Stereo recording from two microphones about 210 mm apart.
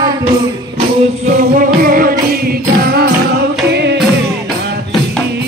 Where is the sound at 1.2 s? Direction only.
45° right (ahead or behind).